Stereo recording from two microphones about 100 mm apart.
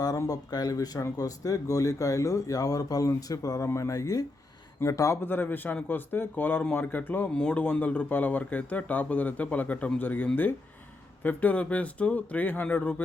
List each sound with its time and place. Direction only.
0.2 s speech: 40° left (ahead or behind)
5.2 s speech: 20° left (ahead or behind)